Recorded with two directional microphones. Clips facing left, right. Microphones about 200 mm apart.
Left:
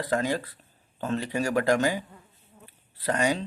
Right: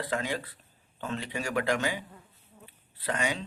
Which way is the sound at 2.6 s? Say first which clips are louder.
Left 5 dB; 40° left (ahead or behind).